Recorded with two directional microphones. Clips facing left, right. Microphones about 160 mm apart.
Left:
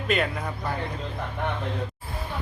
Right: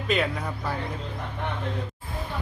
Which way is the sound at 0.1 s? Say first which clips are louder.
Even; centre (ahead or behind).